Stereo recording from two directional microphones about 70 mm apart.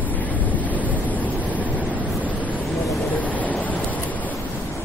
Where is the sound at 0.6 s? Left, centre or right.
Left.